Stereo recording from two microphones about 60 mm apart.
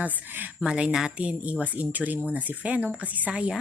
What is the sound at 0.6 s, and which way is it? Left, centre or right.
Speech, centre.